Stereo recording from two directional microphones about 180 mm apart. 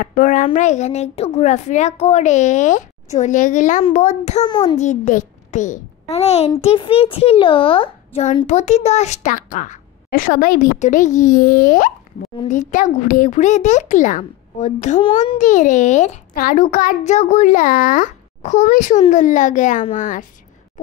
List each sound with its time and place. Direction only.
0.0 s a child's voice: 45° left (ahead or behind)
4.5 s a child's voice: 25° left (ahead or behind)
4.7 s a child's voice: 40° left (ahead or behind)
15.3 s a child's voice: 40° left (ahead or behind)